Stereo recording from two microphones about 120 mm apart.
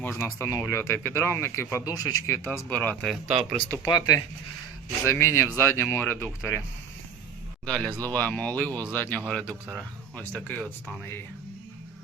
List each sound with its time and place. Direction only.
0.0 s speech: 20° left (ahead or behind)
3.2 s speech: 55° right (ahead or behind)
3.9 s speech: 30° left (ahead or behind)
7.6 s speech: 10° left (ahead or behind)
9.3 s speech: 10° right (ahead or behind)
10.2 s speech: 10° left (ahead or behind)